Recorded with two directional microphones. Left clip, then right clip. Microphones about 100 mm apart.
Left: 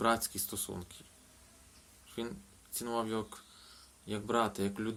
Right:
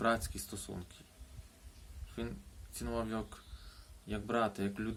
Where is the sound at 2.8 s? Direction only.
25° right (ahead or behind).